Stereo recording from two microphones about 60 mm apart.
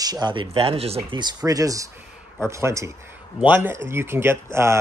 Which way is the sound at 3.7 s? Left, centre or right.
Right.